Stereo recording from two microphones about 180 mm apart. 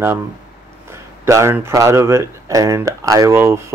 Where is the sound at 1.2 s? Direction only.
15° right (ahead or behind).